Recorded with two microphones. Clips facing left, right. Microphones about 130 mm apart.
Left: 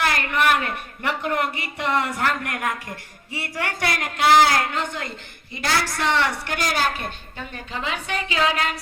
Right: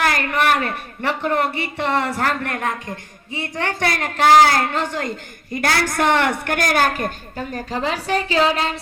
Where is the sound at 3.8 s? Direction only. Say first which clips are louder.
Right 4 dB; 35° right (ahead or behind).